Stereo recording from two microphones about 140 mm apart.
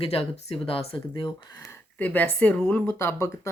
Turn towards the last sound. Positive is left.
turn(degrees=15)  # may be behind; listen again after turning